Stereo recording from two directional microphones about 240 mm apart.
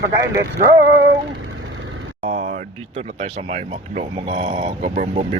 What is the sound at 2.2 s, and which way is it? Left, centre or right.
Speech, right.